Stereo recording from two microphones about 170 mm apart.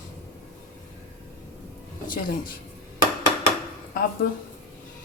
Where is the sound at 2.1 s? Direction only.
55° left (ahead or behind).